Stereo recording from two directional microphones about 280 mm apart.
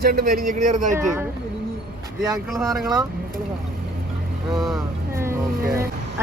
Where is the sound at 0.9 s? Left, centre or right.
Centre.